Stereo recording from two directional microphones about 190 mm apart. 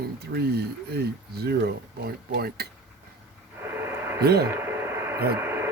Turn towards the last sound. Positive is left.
turn(degrees=-10)  # may be behind; listen again after turning